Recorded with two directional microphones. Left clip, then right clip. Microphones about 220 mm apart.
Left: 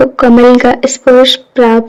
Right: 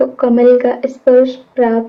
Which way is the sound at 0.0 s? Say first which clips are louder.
Left 5 dB; 45° left (ahead or behind).